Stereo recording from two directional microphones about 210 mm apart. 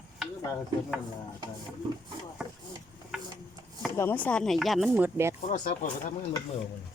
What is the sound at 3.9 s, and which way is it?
Speech, 10° left (ahead or behind).